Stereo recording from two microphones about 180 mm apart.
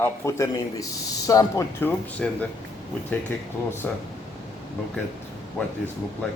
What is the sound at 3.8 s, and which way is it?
Speech, 5° left (ahead or behind).